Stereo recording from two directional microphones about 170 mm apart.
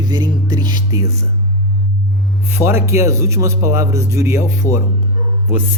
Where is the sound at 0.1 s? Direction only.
25° right (ahead or behind).